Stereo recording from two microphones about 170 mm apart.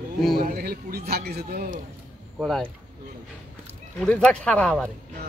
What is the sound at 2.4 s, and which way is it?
Speech, centre (ahead or behind).